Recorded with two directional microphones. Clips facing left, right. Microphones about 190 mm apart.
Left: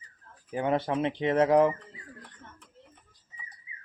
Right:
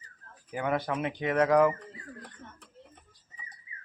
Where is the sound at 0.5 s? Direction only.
25° left (ahead or behind).